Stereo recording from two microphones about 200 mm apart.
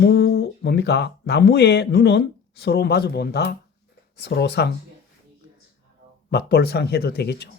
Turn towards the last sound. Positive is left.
turn(degrees=55)  # may be behind; listen again after turning